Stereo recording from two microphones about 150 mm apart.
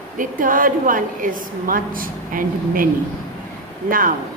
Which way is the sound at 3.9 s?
65° right (ahead or behind).